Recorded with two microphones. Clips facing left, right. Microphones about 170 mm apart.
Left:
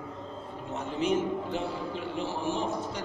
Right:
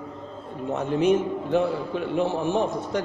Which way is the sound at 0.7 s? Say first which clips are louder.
Right 7 dB; 60° right (ahead or behind).